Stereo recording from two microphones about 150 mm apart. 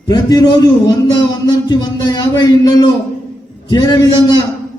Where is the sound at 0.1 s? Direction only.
25° left (ahead or behind).